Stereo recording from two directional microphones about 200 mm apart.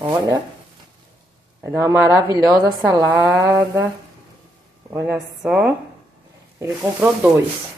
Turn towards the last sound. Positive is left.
turn(degrees=-10)  # may be behind; listen again after turning